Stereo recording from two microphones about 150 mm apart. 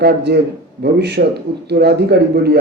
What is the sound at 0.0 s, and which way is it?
A man's voice, 90° right.